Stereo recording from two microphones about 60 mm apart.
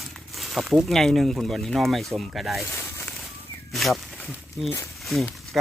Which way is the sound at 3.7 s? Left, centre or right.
Centre.